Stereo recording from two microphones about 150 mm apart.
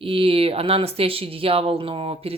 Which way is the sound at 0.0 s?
35° right (ahead or behind).